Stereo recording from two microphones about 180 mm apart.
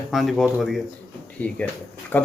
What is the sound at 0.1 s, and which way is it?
Speech, centre (ahead or behind).